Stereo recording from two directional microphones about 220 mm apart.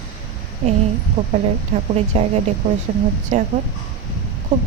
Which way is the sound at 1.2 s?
20° right (ahead or behind).